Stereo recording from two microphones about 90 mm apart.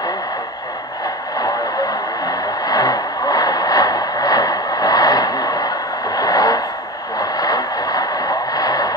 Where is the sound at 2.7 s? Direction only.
45° left (ahead or behind).